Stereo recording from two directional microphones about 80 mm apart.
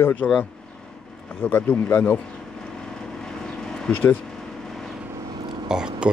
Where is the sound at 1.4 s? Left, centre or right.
Left.